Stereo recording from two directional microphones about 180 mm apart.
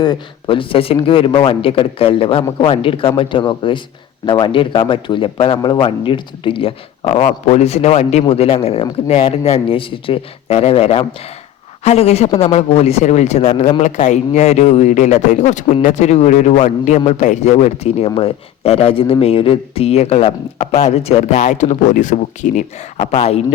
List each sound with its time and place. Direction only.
0.0 s a man's voice: 25° left (ahead or behind)